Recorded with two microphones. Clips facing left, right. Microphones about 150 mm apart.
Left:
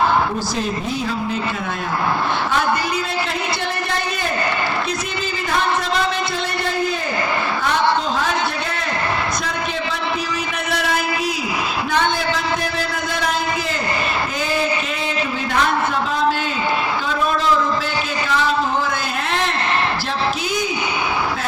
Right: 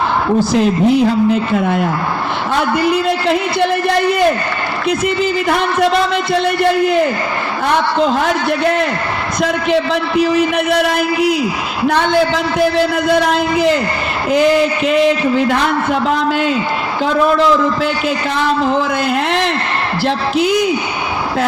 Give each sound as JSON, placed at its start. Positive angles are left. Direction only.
{"t": 0.6, "sound": "speech", "side_deg": -90}
{"t": 2.5, "sound": "a man's voice", "side_deg": -75}
{"t": 4.9, "sound": "a man's voice", "side_deg": -75}
{"t": 9.4, "sound": "a man's voice", "side_deg": -75}
{"t": 10.8, "sound": "a man's voice", "side_deg": -65}
{"t": 13.1, "sound": "speech", "side_deg": -90}
{"t": 20.1, "sound": "a man's voice", "side_deg": -70}